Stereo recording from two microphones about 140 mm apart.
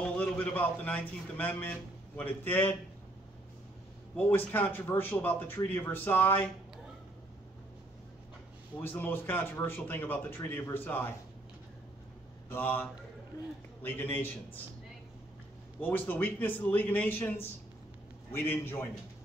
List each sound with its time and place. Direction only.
0.0 s speech: 10° left (ahead or behind)
4.2 s speech: 15° left (ahead or behind)
8.8 s speech: 15° left (ahead or behind)
12.4 s speech: 15° left (ahead or behind)
13.8 s speech: 15° left (ahead or behind)
15.8 s speech: 15° left (ahead or behind)